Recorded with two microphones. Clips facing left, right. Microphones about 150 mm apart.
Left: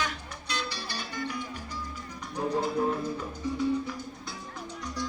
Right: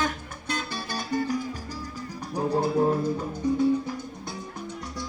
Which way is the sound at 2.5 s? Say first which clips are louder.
Right 5 dB; 40° right (ahead or behind).